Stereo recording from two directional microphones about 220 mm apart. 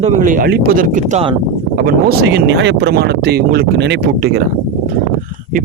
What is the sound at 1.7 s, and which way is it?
Speech, 45° right (ahead or behind).